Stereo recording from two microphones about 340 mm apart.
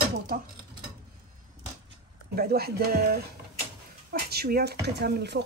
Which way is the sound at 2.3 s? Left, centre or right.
Right.